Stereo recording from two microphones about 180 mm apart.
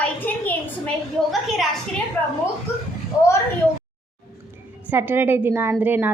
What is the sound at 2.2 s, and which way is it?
Speech, 10° left (ahead or behind).